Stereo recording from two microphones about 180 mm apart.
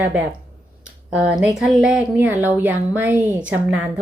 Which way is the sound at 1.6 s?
5° right (ahead or behind).